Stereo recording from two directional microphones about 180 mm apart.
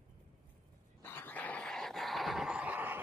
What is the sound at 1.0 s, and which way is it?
Dog, 10° left (ahead or behind).